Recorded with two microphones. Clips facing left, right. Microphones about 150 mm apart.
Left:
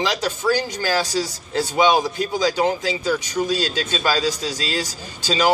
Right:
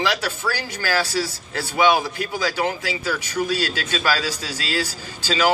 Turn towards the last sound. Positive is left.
turn(degrees=15)  # may be behind; listen again after turning